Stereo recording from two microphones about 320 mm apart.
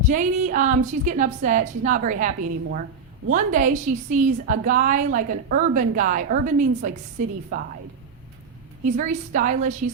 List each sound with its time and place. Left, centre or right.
0.1 s a woman's voice: right
8.8 s a woman's voice: right